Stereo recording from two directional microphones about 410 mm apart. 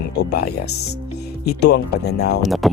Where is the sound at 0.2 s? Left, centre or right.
Left.